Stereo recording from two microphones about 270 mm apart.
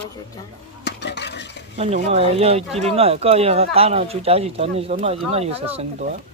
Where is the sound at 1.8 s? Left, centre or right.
Right.